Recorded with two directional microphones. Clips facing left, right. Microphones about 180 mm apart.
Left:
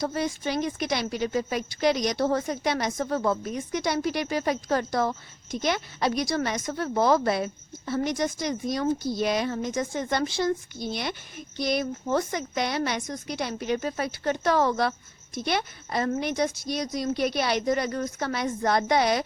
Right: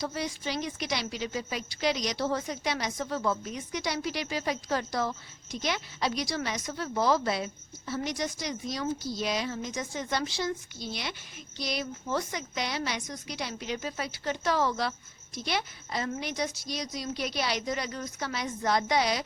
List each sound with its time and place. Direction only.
0.0 s a woman's voice: 50° left (ahead or behind)